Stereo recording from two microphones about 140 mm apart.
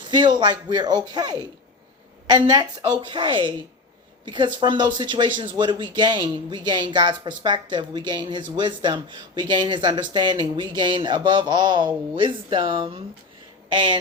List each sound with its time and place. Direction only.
0.1 s speech: 30° right (ahead or behind)